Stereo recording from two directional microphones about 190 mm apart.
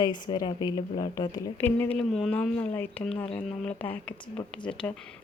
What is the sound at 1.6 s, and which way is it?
Speech, 10° left (ahead or behind).